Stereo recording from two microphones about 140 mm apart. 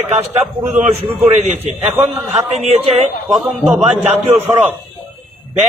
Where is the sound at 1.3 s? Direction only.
55° right (ahead or behind).